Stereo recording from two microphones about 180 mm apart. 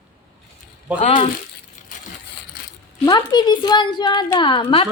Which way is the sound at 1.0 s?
30° left (ahead or behind).